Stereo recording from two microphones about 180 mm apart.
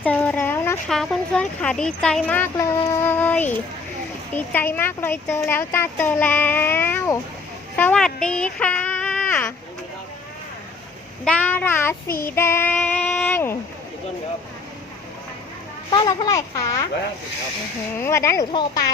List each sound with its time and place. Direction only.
0.0 s a sound: 10° left (ahead or behind)
0.9 s speech: centre (ahead or behind)
7.8 s a sound: 5° left (ahead or behind)
11.3 s speech: 10° left (ahead or behind)
12.0 s child singing: 55° left (ahead or behind)
12.3 s child singing: 15° left (ahead or behind)
15.9 s a child's voice: 25° left (ahead or behind)
18.0 s speech: 15° left (ahead or behind)